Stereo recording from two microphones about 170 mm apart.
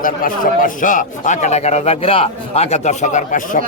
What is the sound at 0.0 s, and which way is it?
A man's voice, 55° left (ahead or behind).